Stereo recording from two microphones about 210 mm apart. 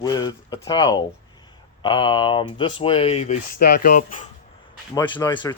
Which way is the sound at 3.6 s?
45° left (ahead or behind).